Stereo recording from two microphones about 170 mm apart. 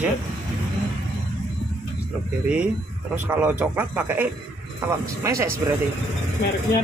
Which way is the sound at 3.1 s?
5° right (ahead or behind).